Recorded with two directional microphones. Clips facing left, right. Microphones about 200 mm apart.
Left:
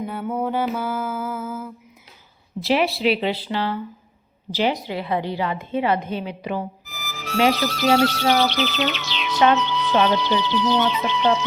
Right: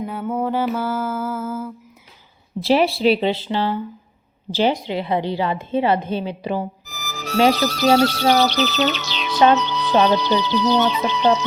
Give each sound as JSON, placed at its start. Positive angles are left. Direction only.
{"t": 0.0, "sound": "mantra", "side_deg": 5}
{"t": 0.8, "sound": "music", "side_deg": 10}
{"t": 2.6, "sound": "a woman's voice", "side_deg": -30}